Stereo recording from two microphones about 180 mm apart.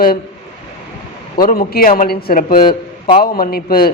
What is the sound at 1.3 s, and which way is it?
A man's voice, 55° left (ahead or behind).